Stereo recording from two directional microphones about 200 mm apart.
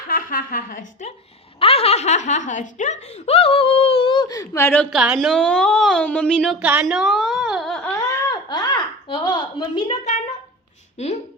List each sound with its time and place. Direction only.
0.1 s speech: 45° left (ahead or behind); by 4.9 s 10° left (ahead or behind)
4.9 s a woman's voice: centre (ahead or behind)
7.9 s a sound: 20° left (ahead or behind)
10.9 s speech: 35° left (ahead or behind)